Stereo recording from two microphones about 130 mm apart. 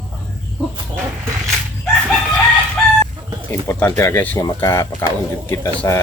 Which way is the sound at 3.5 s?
15° left (ahead or behind).